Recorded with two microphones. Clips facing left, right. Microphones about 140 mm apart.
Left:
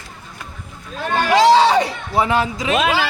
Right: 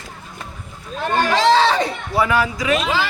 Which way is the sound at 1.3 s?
15° left (ahead or behind).